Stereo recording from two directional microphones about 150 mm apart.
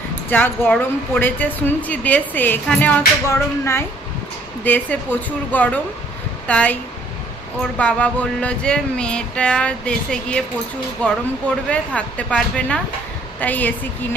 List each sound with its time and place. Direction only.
0.3 s music: 15° left (ahead or behind)
3.2 s music: 15° left (ahead or behind)